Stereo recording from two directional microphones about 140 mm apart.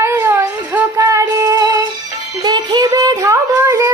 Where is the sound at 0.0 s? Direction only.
20° right (ahead or behind).